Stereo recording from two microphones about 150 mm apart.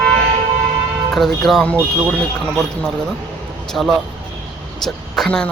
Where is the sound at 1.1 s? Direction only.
Centre (ahead or behind).